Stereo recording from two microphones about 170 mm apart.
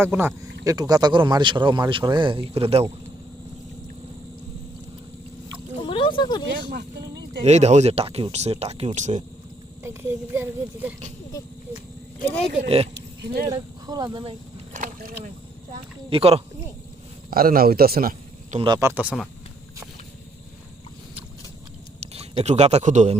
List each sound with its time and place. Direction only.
0.0 s speech: 10° right (ahead or behind); by 2.8 s 35° right (ahead or behind)
5.8 s a sound: 30° left (ahead or behind)
6.5 s speech: 70° right (ahead or behind)
7.4 s speech: 40° right (ahead or behind)
9.8 s speech: 15° right (ahead or behind)
11.3 s speech: 20° left (ahead or behind)
12.6 s speech: 35° right (ahead or behind)
13.5 s speech: 25° right (ahead or behind)
14.8 s boat: 55° right (ahead or behind)
16.0 s speech: 35° right (ahead or behind)
17.3 s a man's voice: 60° right (ahead or behind)
18.6 s speech: 20° right (ahead or behind); by 19.3 s 5° right (ahead or behind)
22.0 s a man's voice: 35° right (ahead or behind)